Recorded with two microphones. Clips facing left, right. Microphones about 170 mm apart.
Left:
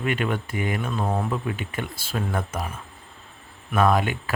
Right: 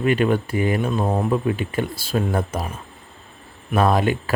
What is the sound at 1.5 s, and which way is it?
Speech, 35° right (ahead or behind).